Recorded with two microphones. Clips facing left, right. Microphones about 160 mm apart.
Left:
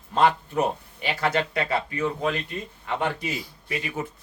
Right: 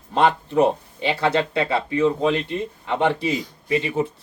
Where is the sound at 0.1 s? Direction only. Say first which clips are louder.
Right 2 dB; 30° right (ahead or behind).